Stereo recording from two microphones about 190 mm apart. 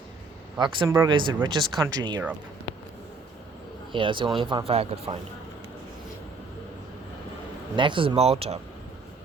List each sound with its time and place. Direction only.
0.6 s speech: 25° right (ahead or behind)
3.9 s speech: 25° right (ahead or behind)
7.8 s speech: 25° right (ahead or behind)